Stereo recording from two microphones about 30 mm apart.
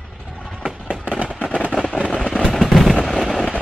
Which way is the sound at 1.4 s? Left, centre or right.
Left.